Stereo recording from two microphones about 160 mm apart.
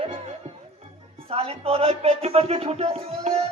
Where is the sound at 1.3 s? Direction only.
40° right (ahead or behind).